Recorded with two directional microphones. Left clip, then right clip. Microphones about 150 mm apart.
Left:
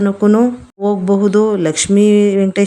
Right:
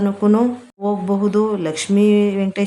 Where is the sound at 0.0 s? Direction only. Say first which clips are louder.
Left 4 dB; 25° left (ahead or behind).